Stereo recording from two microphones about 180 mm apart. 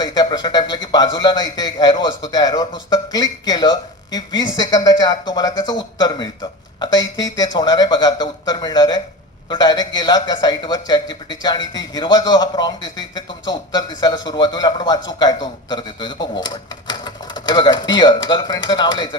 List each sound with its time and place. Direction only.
0.0 s a man's voice: 25° left (ahead or behind)